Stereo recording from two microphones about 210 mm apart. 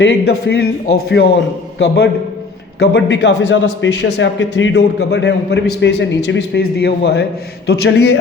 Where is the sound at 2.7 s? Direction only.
50° left (ahead or behind).